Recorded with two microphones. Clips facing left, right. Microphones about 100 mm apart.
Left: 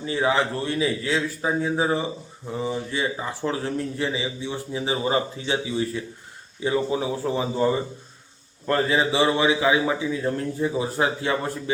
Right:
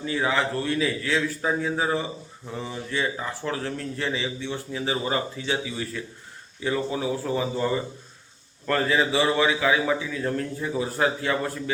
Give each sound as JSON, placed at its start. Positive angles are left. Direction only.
{"t": 0.0, "sound": "speech", "side_deg": 25}